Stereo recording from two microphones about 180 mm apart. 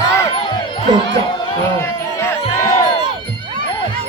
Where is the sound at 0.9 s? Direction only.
25° right (ahead or behind).